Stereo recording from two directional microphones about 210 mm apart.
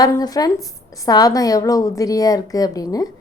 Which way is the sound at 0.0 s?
15° left (ahead or behind).